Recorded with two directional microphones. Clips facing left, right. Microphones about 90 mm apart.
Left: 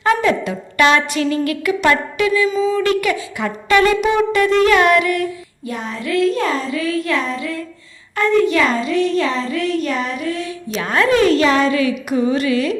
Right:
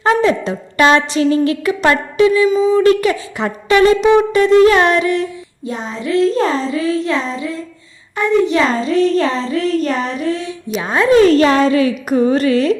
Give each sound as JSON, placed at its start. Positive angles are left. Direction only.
{"t": 0.0, "sound": "a woman's voice", "side_deg": -30}
{"t": 11.3, "sound": "a child's voice", "side_deg": -35}